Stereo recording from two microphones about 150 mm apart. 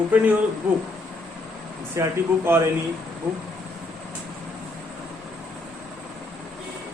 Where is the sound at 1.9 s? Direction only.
15° right (ahead or behind).